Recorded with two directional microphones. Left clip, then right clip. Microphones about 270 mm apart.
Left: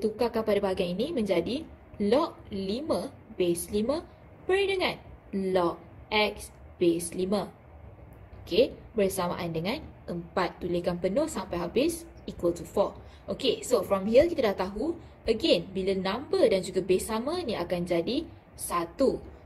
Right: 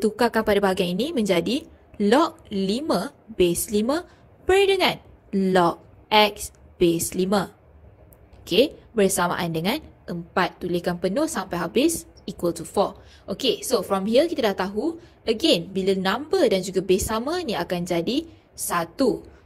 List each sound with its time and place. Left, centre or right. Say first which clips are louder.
0.0 s a woman's voice: right 7 dB; right
8.5 s a woman's voice: right 5 dB; right